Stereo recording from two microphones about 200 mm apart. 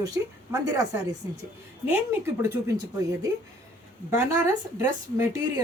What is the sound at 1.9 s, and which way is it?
Speech, 15° right (ahead or behind).